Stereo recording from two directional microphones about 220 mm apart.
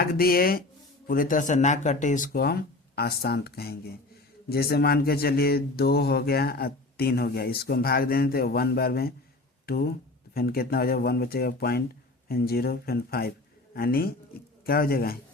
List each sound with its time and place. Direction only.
0.0 s speech: 45° left (ahead or behind)